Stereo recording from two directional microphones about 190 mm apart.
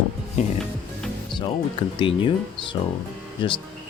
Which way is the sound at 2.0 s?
25° left (ahead or behind).